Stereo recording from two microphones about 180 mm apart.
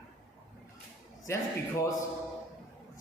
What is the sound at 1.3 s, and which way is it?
Speech, 15° left (ahead or behind).